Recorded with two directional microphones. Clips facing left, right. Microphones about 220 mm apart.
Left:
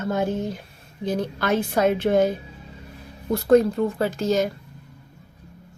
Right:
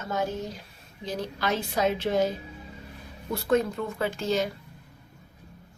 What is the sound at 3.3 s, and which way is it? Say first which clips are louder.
A woman's voice: left 8 dB; 35° left (ahead or behind).